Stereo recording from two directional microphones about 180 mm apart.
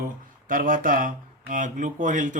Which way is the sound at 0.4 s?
50° right (ahead or behind).